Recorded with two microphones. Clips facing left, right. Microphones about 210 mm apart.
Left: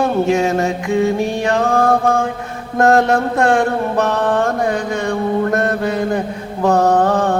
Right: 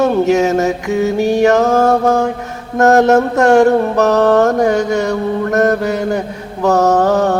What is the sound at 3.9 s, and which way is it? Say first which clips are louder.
Mantra: right 5 dB; 75° right (ahead or behind).